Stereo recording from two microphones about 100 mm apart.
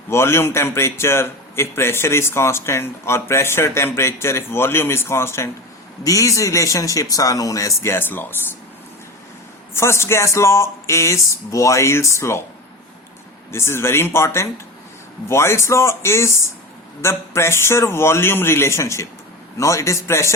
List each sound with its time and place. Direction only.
0.1 s a man's voice: 25° left (ahead or behind)
9.7 s a man's voice: 25° left (ahead or behind)
13.5 s a man's voice: 25° left (ahead or behind)